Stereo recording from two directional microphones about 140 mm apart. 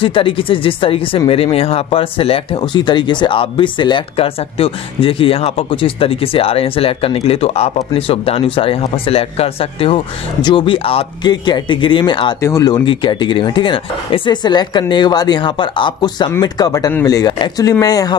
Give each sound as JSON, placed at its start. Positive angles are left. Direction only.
{"t": 0.0, "sound": "speech", "side_deg": 40}
{"t": 12.4, "sound": "speech", "side_deg": 20}